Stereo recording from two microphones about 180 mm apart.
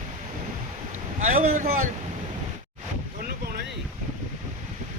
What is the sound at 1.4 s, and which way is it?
Speech, 35° right (ahead or behind).